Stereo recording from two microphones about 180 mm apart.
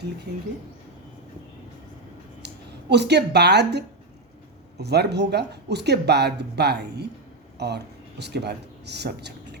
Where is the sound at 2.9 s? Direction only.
70° right (ahead or behind).